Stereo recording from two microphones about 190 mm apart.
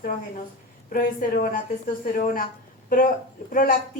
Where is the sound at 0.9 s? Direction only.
50° left (ahead or behind).